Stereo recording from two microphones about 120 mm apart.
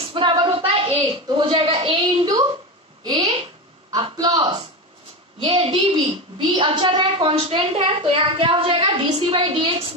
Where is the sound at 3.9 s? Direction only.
35° right (ahead or behind).